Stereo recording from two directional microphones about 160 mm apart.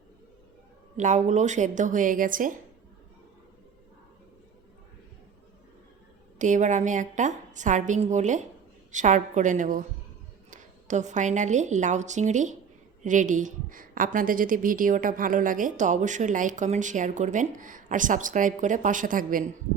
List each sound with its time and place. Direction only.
0.9 s a woman's voice: 50° right (ahead or behind)
6.4 s a woman's voice: 50° right (ahead or behind)